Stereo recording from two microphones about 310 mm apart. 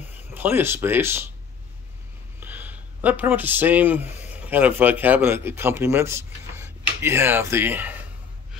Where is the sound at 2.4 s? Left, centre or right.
Centre.